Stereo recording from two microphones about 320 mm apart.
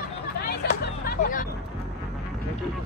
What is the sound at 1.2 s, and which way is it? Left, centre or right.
Music, left.